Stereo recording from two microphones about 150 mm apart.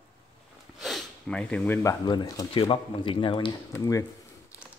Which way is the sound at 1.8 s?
25° left (ahead or behind).